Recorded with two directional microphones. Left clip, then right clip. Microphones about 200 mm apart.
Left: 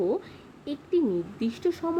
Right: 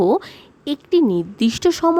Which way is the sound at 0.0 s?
55° right (ahead or behind).